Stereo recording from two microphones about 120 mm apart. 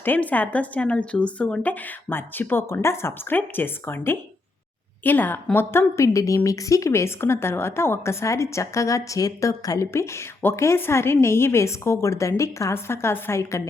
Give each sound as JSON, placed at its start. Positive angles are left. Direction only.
{"t": 0.0, "sound": "a woman's voice", "side_deg": 15}